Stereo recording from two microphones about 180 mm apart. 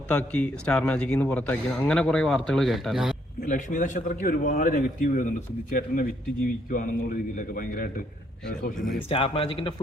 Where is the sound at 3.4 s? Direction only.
45° left (ahead or behind).